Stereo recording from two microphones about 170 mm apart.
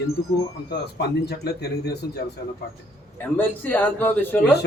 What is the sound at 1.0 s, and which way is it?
A man's voice, 70° left (ahead or behind).